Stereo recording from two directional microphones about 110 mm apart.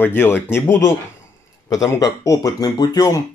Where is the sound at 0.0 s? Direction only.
20° left (ahead or behind).